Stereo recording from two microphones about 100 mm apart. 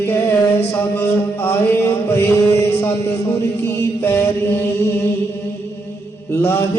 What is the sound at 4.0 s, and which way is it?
Mantra, 20° left (ahead or behind).